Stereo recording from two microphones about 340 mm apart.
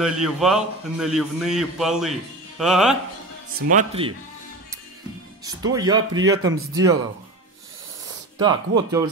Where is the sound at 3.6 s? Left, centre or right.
Right.